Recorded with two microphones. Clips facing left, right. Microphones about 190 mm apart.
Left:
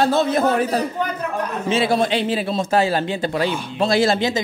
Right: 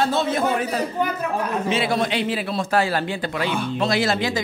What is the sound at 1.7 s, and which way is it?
Speech, 30° left (ahead or behind).